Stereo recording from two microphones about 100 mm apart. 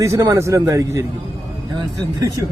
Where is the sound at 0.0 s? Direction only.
30° right (ahead or behind).